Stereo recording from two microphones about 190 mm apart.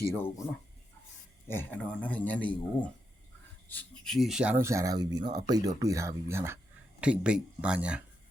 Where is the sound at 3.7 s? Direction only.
5° left (ahead or behind).